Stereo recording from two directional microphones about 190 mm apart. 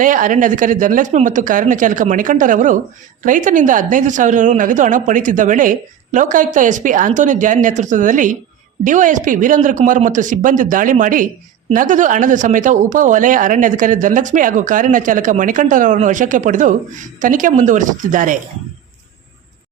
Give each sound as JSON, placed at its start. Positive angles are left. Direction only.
{"t": 0.0, "sound": "speech", "side_deg": -45}